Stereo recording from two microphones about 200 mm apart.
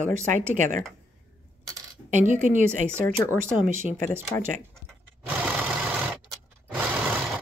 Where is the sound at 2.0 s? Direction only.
40° right (ahead or behind).